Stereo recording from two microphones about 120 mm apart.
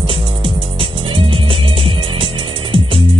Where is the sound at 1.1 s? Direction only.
45° right (ahead or behind).